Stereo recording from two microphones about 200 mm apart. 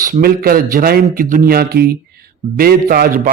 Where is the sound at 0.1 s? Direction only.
50° right (ahead or behind).